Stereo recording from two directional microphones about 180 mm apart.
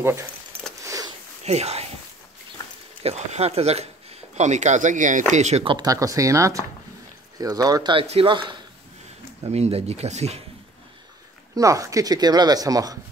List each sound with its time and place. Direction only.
0.0 s speech: 15° right (ahead or behind)
0.8 s a sound: 20° right (ahead or behind)
1.4 s speech: 35° right (ahead or behind)
3.0 s speech: 35° right (ahead or behind)
11.5 s speech: 20° right (ahead or behind)